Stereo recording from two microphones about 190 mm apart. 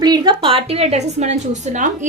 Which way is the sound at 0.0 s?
20° right (ahead or behind).